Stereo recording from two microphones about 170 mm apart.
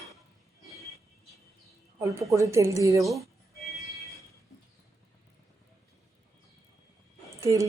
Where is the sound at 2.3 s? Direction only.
15° right (ahead or behind).